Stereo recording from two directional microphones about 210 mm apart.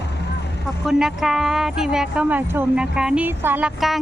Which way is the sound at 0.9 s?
Centre (ahead or behind).